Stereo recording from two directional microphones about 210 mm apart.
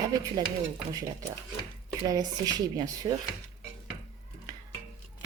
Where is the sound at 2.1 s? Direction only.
20° right (ahead or behind).